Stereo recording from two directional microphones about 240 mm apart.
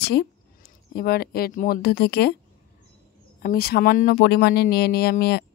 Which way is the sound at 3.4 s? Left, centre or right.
Left.